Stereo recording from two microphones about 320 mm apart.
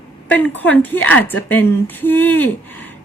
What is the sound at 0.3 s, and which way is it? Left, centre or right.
A woman's voice, centre.